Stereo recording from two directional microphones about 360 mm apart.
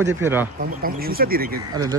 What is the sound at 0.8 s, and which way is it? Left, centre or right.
Speech, right.